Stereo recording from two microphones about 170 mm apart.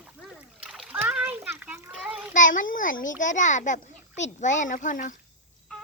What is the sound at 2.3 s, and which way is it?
A child's voice, 50° left (ahead or behind).